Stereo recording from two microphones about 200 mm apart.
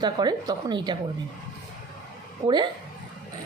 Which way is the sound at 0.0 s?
20° right (ahead or behind).